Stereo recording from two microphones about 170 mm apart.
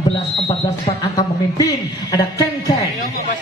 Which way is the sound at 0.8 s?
20° left (ahead or behind).